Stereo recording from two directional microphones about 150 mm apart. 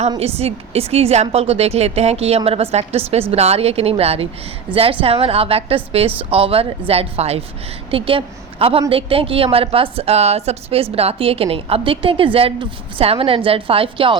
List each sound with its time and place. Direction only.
0.2 s a woman's voice: 40° right (ahead or behind)